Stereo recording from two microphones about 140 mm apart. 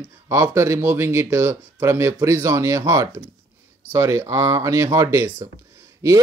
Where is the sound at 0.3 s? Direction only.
20° right (ahead or behind).